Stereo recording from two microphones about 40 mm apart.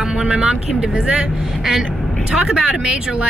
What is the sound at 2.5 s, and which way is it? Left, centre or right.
Speech, centre.